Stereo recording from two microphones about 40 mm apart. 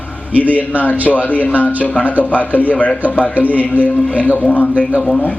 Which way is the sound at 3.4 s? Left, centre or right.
Right.